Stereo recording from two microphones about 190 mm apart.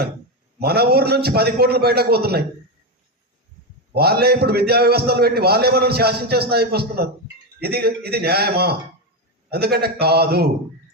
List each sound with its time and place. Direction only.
0.6 s a man's voice: 55° right (ahead or behind)
3.9 s a man's voice: 55° right (ahead or behind)